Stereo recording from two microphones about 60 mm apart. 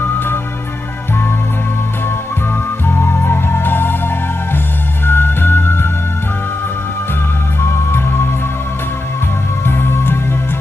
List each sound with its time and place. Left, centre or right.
0.0 s music: left
2.9 s music: left
5.0 s music: left
7.6 s music: left
9.7 s music: left